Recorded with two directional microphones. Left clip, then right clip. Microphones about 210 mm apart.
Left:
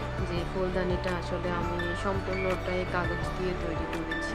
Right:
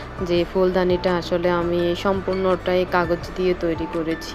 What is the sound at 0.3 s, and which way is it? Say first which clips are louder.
Speech: right 15 dB; 40° right (ahead or behind).